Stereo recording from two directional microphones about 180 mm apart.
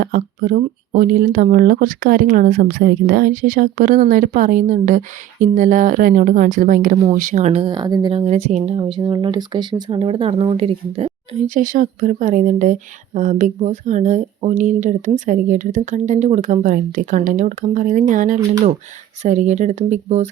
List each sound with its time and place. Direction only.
0.0 s speech: 50° right (ahead or behind); by 8.2 s 25° right (ahead or behind)
8.3 s speech: 40° right (ahead or behind)
8.7 s speech: 25° right (ahead or behind)
11.4 s speech: 45° right (ahead or behind)